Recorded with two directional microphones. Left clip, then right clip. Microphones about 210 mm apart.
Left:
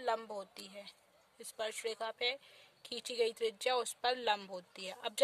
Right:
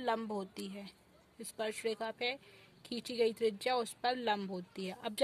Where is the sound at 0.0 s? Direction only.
15° left (ahead or behind).